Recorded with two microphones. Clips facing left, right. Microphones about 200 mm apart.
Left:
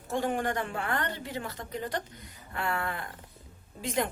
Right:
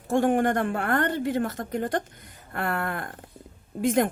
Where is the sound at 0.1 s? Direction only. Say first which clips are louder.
Right 8 dB; 55° right (ahead or behind).